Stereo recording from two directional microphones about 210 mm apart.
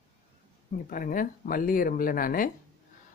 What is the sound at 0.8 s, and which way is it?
Speech, 40° left (ahead or behind).